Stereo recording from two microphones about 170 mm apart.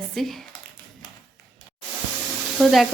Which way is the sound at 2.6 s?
Centre (ahead or behind).